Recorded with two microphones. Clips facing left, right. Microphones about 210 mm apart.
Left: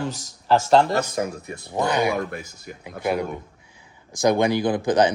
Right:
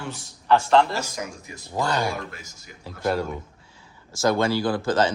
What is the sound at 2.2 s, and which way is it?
Speech, 55° left (ahead or behind).